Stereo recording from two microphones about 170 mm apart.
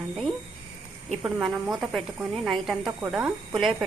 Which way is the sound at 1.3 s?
Centre (ahead or behind).